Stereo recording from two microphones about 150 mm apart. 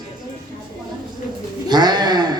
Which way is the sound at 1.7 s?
30° right (ahead or behind).